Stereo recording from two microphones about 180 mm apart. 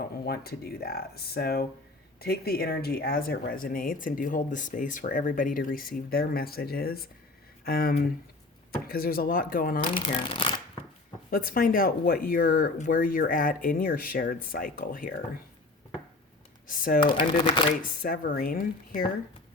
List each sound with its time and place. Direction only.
0.3 s speech: 60° left (ahead or behind)
10.2 s speech: 30° left (ahead or behind)
11.3 s speech: 55° left (ahead or behind)
16.6 s speech: 50° left (ahead or behind)
17.0 s speech: 25° left (ahead or behind)
18.0 s speech: 50° left (ahead or behind)